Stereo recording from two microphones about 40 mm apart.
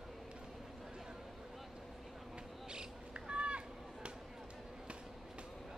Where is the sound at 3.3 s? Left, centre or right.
Right.